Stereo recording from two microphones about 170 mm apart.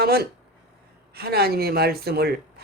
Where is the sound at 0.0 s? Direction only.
65° right (ahead or behind).